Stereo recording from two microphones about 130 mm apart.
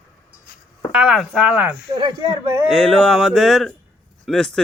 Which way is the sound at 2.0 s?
40° right (ahead or behind).